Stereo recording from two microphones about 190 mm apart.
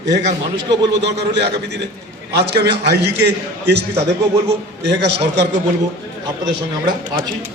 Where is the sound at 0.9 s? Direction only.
65° right (ahead or behind).